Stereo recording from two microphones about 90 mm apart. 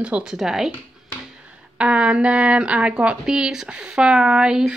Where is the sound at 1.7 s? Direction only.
10° right (ahead or behind).